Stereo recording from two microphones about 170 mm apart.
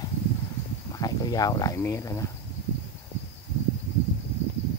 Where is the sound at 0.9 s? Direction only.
20° left (ahead or behind).